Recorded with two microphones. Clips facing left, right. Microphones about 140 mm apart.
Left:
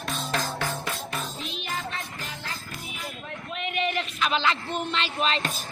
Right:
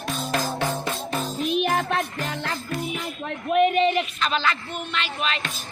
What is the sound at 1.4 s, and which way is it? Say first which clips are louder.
Music: right 11 dB; 55° right (ahead or behind).